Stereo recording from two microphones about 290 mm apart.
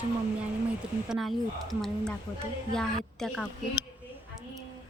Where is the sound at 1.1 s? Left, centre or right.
Centre.